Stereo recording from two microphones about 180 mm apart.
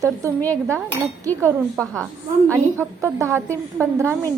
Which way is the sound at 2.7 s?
15° right (ahead or behind).